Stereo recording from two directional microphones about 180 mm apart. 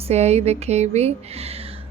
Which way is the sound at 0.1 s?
35° right (ahead or behind).